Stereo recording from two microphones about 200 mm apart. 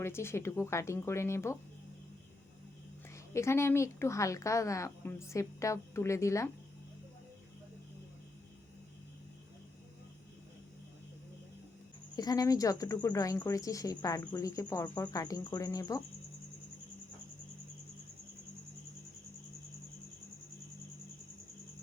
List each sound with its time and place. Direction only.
0.0 s speech: 10° left (ahead or behind)
3.3 s speech: 15° left (ahead or behind)
12.1 s speech: 20° left (ahead or behind)